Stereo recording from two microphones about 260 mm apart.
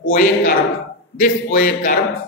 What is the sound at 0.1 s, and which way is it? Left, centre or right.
Speech, left.